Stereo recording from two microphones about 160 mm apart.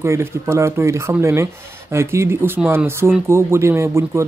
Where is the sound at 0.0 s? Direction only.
15° right (ahead or behind).